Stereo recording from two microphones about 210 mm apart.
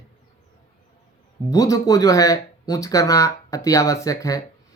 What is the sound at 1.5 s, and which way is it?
Speech, 15° left (ahead or behind).